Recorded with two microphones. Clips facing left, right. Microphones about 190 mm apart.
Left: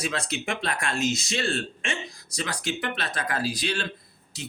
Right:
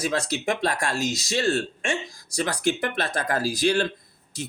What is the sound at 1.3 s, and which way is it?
Speech, 40° right (ahead or behind).